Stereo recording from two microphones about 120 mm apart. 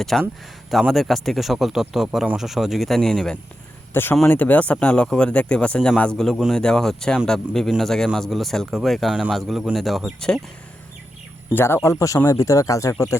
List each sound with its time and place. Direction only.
0.0 s speech: centre (ahead or behind)
3.9 s speech: 20° left (ahead or behind)
11.5 s speech: 20° left (ahead or behind)